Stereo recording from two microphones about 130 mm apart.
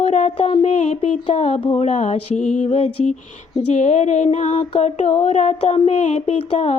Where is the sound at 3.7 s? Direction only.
65° left (ahead or behind).